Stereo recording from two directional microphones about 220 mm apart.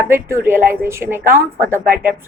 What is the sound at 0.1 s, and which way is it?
A woman's voice, 10° right (ahead or behind).